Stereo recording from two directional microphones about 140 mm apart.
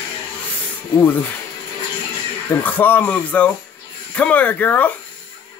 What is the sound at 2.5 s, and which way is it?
Speech, 15° left (ahead or behind).